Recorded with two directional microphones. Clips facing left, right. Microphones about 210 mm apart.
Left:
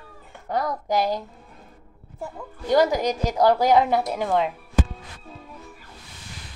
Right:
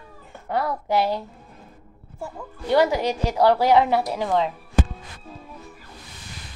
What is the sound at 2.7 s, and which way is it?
Speech, 45° left (ahead or behind).